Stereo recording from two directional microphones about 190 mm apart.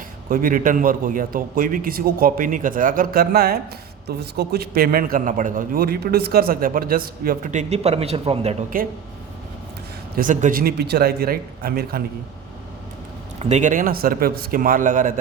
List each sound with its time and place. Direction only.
0.3 s a man's voice: 45° right (ahead or behind); by 8.5 s 30° right (ahead or behind)
8.7 s a man's voice: 45° right (ahead or behind)
10.2 s a man's voice: 45° right (ahead or behind)
13.4 s a man's voice: 40° right (ahead or behind)